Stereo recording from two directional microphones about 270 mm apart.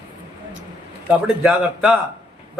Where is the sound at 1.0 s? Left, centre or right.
Centre.